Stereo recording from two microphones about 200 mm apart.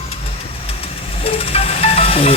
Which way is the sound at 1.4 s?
30° left (ahead or behind).